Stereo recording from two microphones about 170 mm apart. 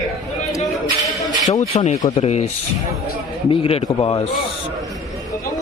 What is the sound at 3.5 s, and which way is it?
Speech, 35° left (ahead or behind).